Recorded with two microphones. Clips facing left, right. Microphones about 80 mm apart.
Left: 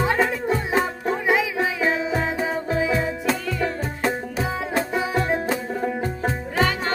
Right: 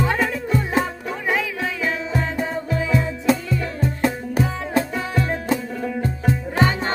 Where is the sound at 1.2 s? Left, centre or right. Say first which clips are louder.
Left 1 dB; centre.